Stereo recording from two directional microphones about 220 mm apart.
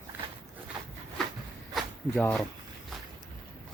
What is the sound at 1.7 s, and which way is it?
Zipper, 5° left (ahead or behind).